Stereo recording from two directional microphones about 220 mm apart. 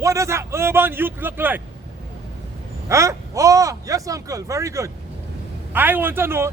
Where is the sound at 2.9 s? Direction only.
15° right (ahead or behind).